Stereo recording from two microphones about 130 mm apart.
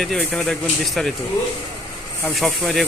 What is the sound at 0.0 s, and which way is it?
A man's voice, 5° left (ahead or behind).